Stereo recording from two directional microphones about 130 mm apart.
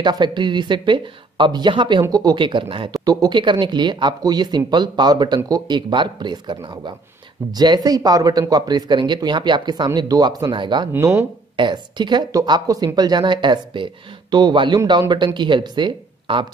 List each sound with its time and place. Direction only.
0.0 s speech: 35° right (ahead or behind)
2.9 s speech: 30° right (ahead or behind)
10.9 s speech: 25° right (ahead or behind)
11.5 s speech: 35° right (ahead or behind)